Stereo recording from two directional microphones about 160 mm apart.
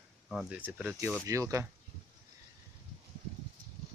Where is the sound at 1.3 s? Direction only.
20° right (ahead or behind).